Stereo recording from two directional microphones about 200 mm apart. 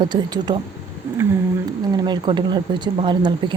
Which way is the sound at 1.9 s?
25° right (ahead or behind).